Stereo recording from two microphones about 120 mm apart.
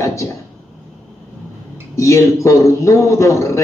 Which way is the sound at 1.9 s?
25° left (ahead or behind).